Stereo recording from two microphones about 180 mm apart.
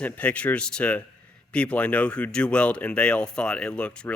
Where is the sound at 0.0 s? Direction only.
10° left (ahead or behind).